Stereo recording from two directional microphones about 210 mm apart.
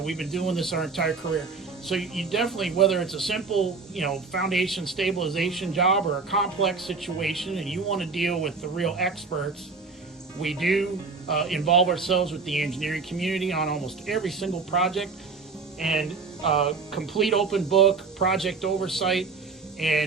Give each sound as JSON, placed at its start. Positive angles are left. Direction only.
{"t": 0.0, "sound": "a man's voice", "side_deg": 0}
{"t": 10.4, "sound": "a man's voice", "side_deg": 0}